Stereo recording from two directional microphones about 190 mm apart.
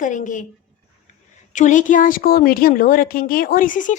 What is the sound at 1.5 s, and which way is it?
A woman's voice, 40° left (ahead or behind).